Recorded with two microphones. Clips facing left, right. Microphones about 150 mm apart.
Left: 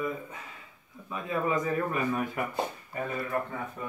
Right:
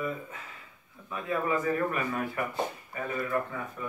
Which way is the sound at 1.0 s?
20° left (ahead or behind).